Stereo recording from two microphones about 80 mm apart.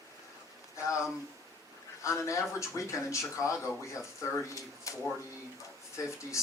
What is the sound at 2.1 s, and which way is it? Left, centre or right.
Speech, left.